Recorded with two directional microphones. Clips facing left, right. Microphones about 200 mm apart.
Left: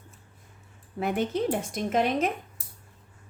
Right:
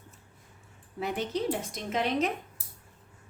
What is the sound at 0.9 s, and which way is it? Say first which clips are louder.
Speech: left 4 dB; 55° left (ahead or behind).